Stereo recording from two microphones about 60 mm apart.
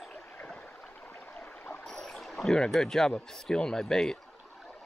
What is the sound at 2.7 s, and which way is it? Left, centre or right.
Speech, centre.